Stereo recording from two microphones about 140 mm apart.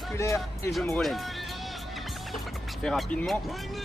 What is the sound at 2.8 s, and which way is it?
Speech, 5° left (ahead or behind).